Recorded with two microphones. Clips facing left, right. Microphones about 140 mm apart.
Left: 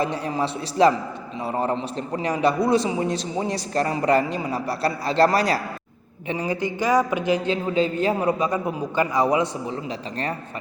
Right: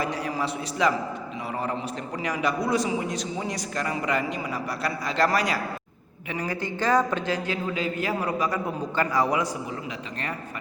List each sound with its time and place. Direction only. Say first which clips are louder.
0.0 s a man's voice: left 4 dB; 25° left (ahead or behind)